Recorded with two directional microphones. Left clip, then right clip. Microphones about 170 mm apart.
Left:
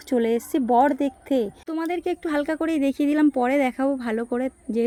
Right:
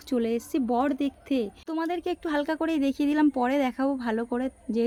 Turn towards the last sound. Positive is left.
turn(degrees=10)  # may be behind; listen again after turning